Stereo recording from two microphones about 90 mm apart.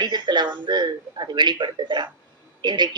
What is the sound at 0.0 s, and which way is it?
A woman's voice, 55° right (ahead or behind).